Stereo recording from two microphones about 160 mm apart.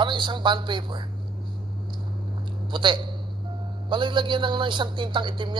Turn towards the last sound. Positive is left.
turn(degrees=-30)  # may be behind; listen again after turning